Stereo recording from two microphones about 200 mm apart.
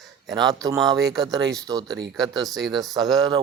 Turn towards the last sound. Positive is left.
turn(degrees=-20)  # may be behind; listen again after turning